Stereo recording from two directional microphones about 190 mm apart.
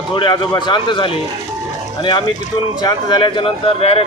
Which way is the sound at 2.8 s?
20° left (ahead or behind).